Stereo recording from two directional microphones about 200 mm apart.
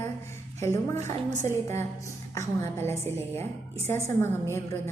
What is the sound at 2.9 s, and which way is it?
A woman's voice, 10° left (ahead or behind).